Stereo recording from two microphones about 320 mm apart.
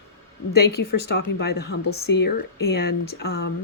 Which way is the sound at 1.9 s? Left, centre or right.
Left.